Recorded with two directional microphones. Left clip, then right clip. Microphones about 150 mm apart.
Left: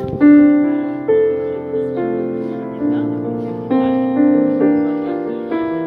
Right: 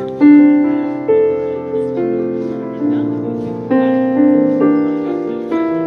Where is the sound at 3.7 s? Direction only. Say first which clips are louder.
Right 3 dB; 20° right (ahead or behind).